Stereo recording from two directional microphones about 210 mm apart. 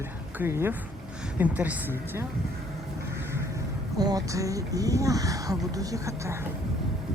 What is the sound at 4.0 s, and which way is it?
Speech, 15° right (ahead or behind).